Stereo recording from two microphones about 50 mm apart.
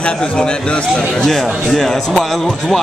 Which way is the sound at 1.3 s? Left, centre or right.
Centre.